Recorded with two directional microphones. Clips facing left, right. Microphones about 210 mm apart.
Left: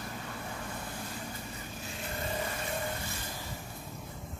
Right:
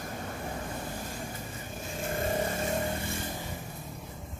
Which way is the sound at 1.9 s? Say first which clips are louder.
Right 7 dB; 50° right (ahead or behind).